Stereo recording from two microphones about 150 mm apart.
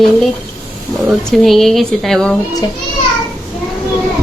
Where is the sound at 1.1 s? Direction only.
Centre (ahead or behind).